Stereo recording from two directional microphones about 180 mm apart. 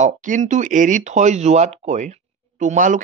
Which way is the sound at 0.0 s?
45° right (ahead or behind).